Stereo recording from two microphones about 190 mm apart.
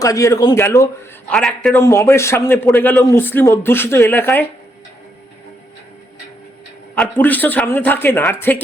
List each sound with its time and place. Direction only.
0.0 s a man's voice: 15° left (ahead or behind)
1.3 s a man's voice: centre (ahead or behind)
1.7 s a man's voice: 15° left (ahead or behind)
6.9 s a man's voice: 5° left (ahead or behind)